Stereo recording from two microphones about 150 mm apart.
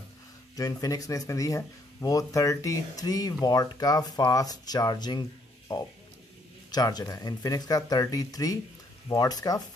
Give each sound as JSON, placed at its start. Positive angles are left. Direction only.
{"t": 0.6, "sound": "speech", "side_deg": 25}
{"t": 6.7, "sound": "speech", "side_deg": 25}